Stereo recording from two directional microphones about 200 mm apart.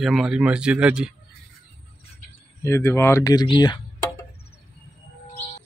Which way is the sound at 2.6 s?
15° left (ahead or behind).